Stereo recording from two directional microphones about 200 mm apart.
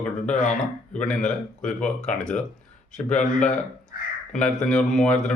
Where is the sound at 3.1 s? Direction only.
40° left (ahead or behind).